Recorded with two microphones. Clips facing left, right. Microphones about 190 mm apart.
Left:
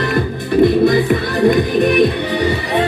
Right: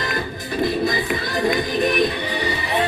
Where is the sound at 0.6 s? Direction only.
60° left (ahead or behind).